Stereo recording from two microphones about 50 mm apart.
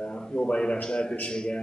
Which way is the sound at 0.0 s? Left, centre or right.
Centre.